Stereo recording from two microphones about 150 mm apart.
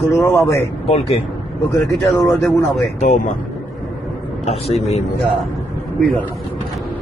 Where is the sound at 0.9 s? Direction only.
40° left (ahead or behind).